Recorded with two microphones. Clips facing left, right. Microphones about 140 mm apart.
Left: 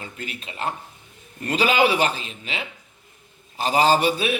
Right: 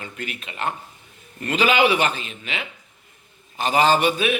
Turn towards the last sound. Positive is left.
turn(degrees=35)  # may be behind; listen again after turning